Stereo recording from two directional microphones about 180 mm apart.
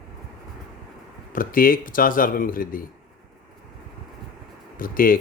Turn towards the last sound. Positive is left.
turn(degrees=50)  # may be behind; listen again after turning